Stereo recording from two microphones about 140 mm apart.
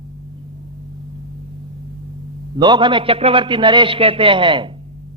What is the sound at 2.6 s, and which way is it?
A man's voice, 35° right (ahead or behind).